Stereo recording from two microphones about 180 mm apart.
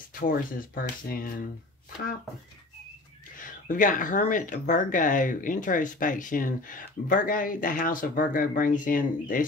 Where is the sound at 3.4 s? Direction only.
45° left (ahead or behind).